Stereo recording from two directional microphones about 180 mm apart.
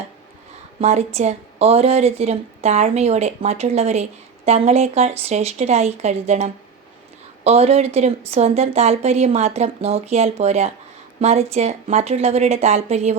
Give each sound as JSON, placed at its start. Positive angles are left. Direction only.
{"t": 0.8, "sound": "a woman's voice", "side_deg": -35}